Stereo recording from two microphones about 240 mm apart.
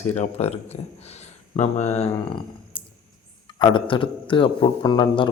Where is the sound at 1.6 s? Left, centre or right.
Left.